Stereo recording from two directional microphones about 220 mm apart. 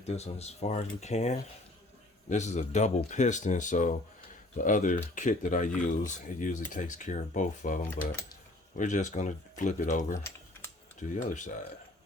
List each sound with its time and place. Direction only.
0.1 s speech: 30° left (ahead or behind)
8.8 s speech: 35° left (ahead or behind)
10.2 s typing: 10° left (ahead or behind)
11.1 s speech: 35° left (ahead or behind)